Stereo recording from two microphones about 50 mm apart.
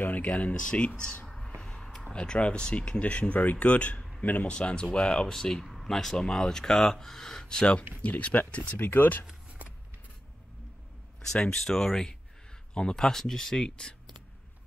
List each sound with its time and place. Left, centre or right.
0.0 s speech: left
1.6 s a sound: centre
2.1 s speech: left
4.5 s speech: centre
5.3 s speech: centre; by 8.7 s left
8.7 s speech: left
11.5 s speech: centre